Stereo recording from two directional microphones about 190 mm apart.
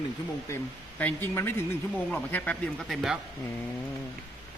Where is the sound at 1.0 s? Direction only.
10° left (ahead or behind).